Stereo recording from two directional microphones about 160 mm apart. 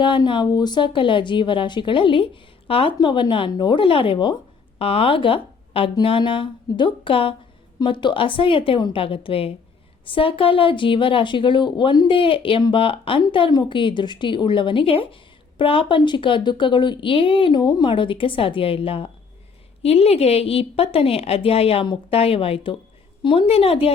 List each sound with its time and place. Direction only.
0.0 s speech: 30° left (ahead or behind)